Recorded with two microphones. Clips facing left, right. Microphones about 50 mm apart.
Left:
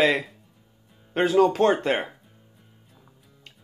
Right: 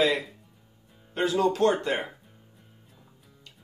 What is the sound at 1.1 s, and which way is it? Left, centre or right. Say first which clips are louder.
Speech: left 5 dB; left.